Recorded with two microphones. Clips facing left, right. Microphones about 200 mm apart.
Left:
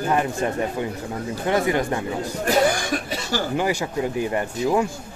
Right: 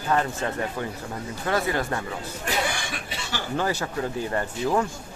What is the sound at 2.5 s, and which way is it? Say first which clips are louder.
Cough: left 9 dB; 40° left (ahead or behind).